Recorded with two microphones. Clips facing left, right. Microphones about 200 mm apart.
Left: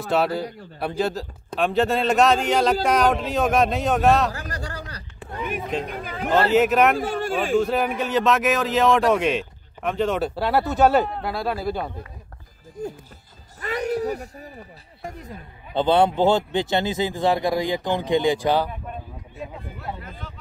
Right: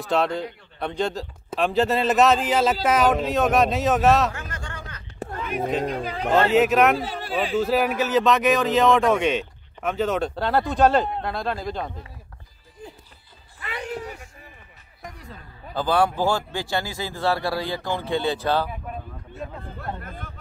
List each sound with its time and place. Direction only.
0.1 s speech: 5° left (ahead or behind)
4.3 s a sound: 35° left (ahead or behind)
6.3 s speech: centre (ahead or behind)
7.0 s speech: 45° left (ahead or behind)
7.5 s speech: 5° right (ahead or behind)
12.8 s music: 45° left (ahead or behind)
13.6 s a sound: 40° left (ahead or behind)
15.0 s speech: 25° left (ahead or behind)
18.7 s a sound: centre (ahead or behind)
20.0 s speech: 50° right (ahead or behind)